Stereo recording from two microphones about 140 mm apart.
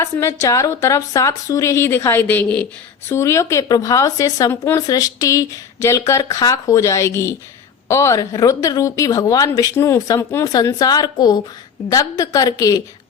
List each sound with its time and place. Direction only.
0.0 s speech: 20° left (ahead or behind)
3.1 s speech: 20° left (ahead or behind)